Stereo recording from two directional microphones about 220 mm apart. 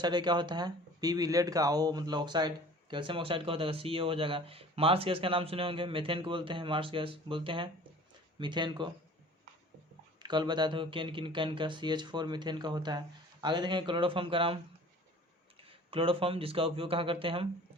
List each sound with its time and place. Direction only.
0.0 s speech: 20° right (ahead or behind)
10.2 s speech: 20° right (ahead or behind)